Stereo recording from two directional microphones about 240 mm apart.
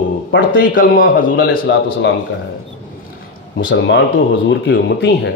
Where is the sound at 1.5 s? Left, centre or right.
Left.